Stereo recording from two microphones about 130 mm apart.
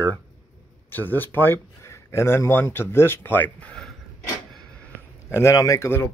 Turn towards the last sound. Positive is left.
turn(degrees=20)  # may be behind; listen again after turning